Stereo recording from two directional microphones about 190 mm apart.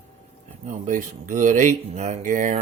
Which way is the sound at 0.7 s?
40° right (ahead or behind).